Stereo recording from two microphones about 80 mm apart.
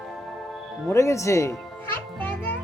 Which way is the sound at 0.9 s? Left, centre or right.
Left.